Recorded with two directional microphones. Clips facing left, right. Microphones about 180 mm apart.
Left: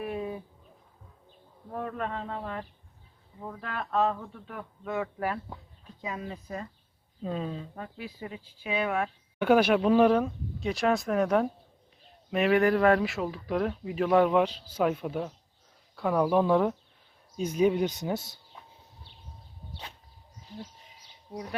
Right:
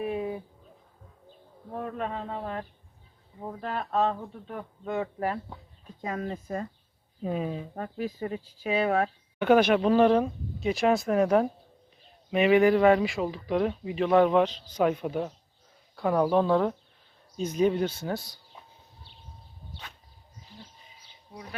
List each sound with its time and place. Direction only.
2.4 s speech: 40° right (ahead or behind)
6.0 s speech: 50° right (ahead or behind)
7.2 s speech: 10° right (ahead or behind)
7.8 s speech: 45° right (ahead or behind)
9.4 s speech: 10° left (ahead or behind)